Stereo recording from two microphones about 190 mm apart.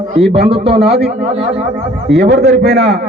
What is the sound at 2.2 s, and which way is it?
Speech, 60° right (ahead or behind).